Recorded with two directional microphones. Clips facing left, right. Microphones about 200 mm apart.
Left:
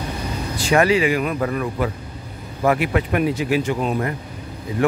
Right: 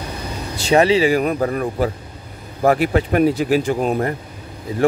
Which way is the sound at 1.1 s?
40° right (ahead or behind).